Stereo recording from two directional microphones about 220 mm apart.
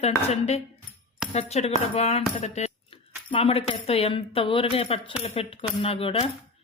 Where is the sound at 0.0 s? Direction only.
30° left (ahead or behind).